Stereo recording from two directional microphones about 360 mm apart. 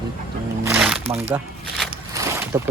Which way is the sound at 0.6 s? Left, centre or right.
Centre.